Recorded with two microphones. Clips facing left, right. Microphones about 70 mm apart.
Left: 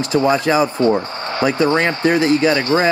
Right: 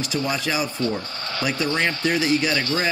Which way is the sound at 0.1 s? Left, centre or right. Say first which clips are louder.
Left 11 dB; left.